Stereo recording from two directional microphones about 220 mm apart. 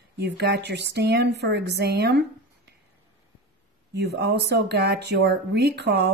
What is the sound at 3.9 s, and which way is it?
Speech, 50° right (ahead or behind).